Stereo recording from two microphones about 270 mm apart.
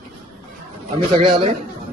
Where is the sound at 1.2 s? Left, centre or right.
Centre.